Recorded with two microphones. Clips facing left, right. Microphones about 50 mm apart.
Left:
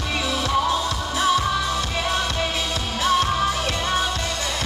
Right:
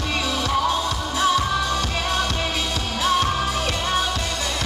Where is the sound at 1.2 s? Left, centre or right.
Centre.